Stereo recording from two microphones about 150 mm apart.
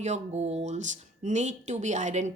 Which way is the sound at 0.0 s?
50° right (ahead or behind).